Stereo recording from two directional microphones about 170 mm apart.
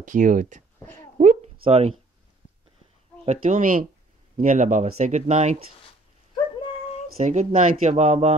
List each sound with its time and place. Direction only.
0.0 s speech: 50° right (ahead or behind)
1.2 s a sound: 45° right (ahead or behind)
1.6 s speech: 35° right (ahead or behind)
3.3 s speech: 45° right (ahead or behind)
7.2 s speech: 50° right (ahead or behind)